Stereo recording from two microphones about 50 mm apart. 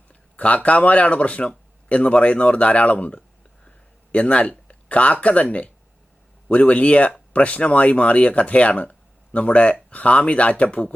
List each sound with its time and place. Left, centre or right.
0.1 s speech: left